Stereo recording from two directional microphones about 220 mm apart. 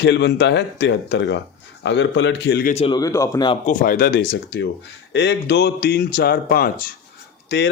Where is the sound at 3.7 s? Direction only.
40° left (ahead or behind).